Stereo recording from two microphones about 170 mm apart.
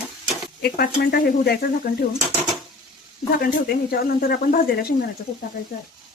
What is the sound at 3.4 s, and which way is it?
Speech, 60° left (ahead or behind).